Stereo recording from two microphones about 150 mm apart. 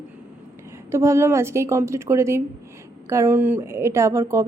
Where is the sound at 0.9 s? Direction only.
20° right (ahead or behind).